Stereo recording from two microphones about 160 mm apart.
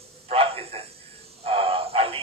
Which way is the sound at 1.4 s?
35° right (ahead or behind).